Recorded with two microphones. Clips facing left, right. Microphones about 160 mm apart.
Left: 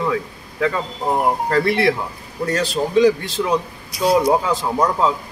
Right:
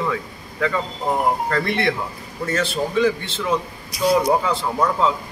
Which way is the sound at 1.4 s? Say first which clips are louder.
Left 4 dB; 35° left (ahead or behind).